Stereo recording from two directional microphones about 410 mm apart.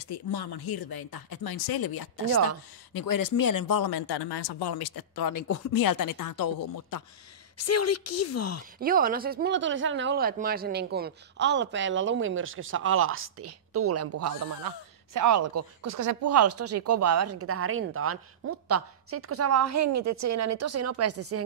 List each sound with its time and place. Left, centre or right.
0.0 s speech: left
7.5 s speech: left
8.7 s speech: right
14.7 s speech: right
15.1 s speech: right